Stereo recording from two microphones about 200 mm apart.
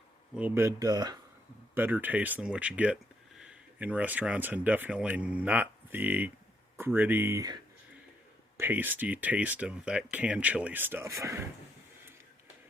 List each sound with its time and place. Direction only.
0.3 s speech: 10° right (ahead or behind)